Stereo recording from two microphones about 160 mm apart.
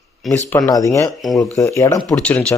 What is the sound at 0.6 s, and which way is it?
Speech, 20° left (ahead or behind).